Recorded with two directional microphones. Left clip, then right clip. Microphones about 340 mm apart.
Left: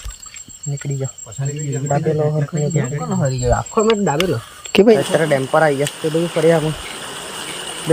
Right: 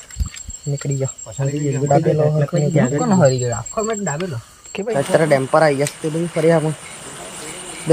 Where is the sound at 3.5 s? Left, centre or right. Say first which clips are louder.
Left 6 dB; left.